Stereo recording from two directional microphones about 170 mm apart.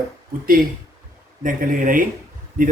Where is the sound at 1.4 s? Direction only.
55° right (ahead or behind).